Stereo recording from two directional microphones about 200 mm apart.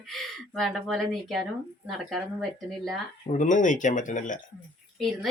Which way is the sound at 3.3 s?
40° left (ahead or behind).